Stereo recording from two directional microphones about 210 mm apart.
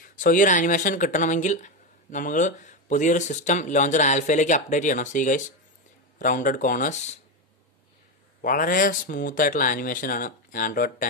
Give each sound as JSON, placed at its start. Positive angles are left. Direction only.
{"t": 0.1, "sound": "speech", "side_deg": 40}
{"t": 8.4, "sound": "speech", "side_deg": 40}